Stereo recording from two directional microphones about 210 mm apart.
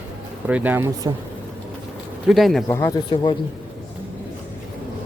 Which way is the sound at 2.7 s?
15° left (ahead or behind).